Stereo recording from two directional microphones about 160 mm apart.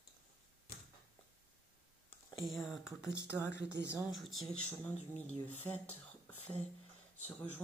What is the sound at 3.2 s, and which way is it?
Speech, 15° left (ahead or behind).